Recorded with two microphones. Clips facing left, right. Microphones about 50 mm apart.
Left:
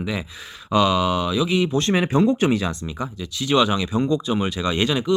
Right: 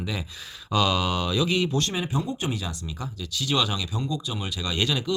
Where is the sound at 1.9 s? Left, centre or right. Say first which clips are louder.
Left 10 dB; left.